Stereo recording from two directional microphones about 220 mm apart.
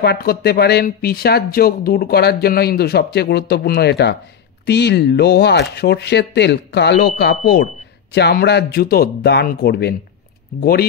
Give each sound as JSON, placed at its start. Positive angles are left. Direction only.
{"t": 0.0, "sound": "speech", "side_deg": 45}